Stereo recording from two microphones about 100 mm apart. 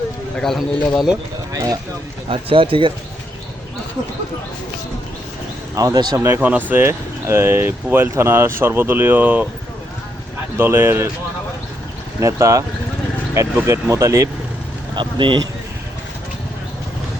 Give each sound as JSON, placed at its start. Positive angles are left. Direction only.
{"t": 0.3, "sound": "a man's voice", "side_deg": 5}
{"t": 1.5, "sound": "speech", "side_deg": -35}
{"t": 2.3, "sound": "speech", "side_deg": -65}
{"t": 5.7, "sound": "speech", "side_deg": -35}
{"t": 6.1, "sound": "speech", "side_deg": -25}
{"t": 10.6, "sound": "speech", "side_deg": -25}
{"t": 12.2, "sound": "speech", "side_deg": -30}
{"t": 14.9, "sound": "speech", "side_deg": -50}